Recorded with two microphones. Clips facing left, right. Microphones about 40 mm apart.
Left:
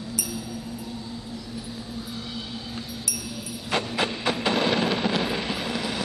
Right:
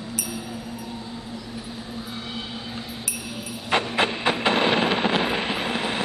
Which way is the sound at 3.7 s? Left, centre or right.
Right.